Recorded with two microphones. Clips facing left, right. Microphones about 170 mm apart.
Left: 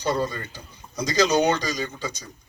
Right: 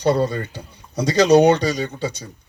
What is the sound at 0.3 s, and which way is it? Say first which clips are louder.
Speech: right 8 dB; 65° right (ahead or behind).